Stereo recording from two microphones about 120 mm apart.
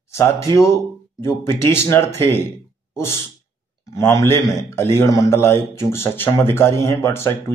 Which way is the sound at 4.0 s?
25° left (ahead or behind).